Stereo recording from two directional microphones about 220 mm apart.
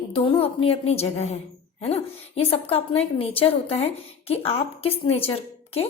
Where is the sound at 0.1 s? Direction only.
25° left (ahead or behind).